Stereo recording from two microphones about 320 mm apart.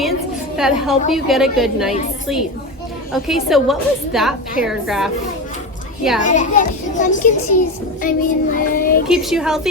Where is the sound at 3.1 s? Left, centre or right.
Centre.